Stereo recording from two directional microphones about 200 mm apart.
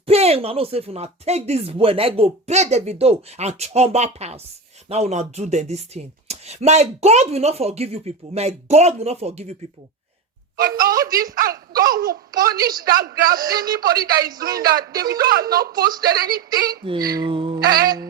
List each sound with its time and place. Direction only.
0.0 s speech: 30° right (ahead or behind)
10.6 s a child's voice: 45° right (ahead or behind)
17.1 s speech: 20° right (ahead or behind)